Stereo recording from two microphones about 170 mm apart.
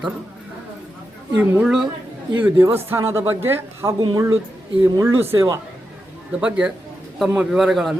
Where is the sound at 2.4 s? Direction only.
15° right (ahead or behind).